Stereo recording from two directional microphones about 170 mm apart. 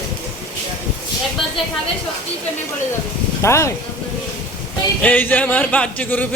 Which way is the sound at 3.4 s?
15° left (ahead or behind).